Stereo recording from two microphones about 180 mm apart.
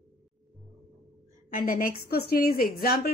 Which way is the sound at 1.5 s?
50° left (ahead or behind).